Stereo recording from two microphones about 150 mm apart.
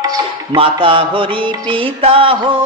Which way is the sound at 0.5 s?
35° right (ahead or behind).